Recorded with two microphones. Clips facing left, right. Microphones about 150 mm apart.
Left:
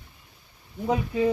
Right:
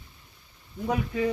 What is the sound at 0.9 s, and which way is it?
Speech, 20° left (ahead or behind).